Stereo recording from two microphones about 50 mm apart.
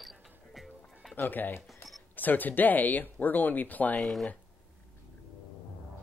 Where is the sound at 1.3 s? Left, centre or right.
Left.